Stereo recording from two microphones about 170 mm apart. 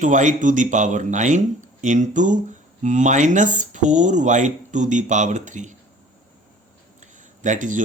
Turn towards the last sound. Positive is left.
turn(degrees=-45)  # may be behind; listen again after turning